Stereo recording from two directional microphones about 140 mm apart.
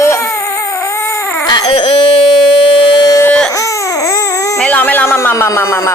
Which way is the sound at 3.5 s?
25° left (ahead or behind).